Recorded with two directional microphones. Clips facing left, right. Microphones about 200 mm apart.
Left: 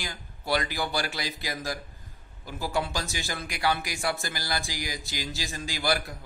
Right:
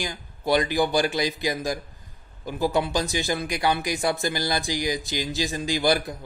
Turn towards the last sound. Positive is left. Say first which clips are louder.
# right 6 dB
turn(degrees=-20)  # may be behind; listen again after turning